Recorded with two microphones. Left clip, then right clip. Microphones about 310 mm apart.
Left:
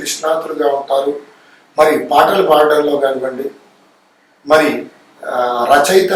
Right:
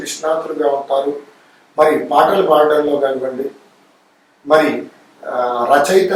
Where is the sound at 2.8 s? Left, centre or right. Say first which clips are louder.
Left 2 dB; right.